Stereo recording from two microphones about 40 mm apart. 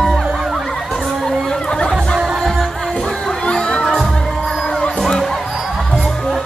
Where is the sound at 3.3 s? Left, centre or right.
Centre.